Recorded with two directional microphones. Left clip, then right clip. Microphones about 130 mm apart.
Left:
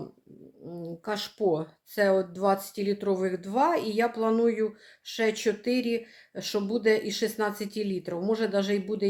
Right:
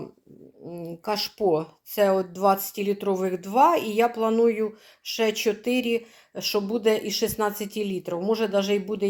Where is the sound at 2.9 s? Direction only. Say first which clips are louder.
Right 2 dB; 5° right (ahead or behind).